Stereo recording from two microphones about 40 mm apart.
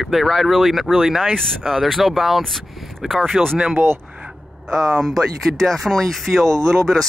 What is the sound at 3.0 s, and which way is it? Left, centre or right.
Speech, centre.